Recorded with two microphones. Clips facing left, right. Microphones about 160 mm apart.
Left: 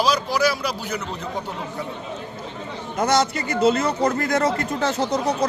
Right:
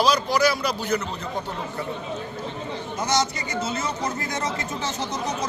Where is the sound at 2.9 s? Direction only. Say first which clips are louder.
Left 5 dB; 55° left (ahead or behind).